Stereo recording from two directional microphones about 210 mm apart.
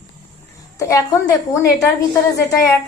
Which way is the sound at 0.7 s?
15° left (ahead or behind).